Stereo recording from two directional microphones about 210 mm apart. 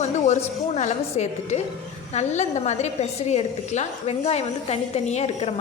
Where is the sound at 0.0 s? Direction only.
30° left (ahead or behind).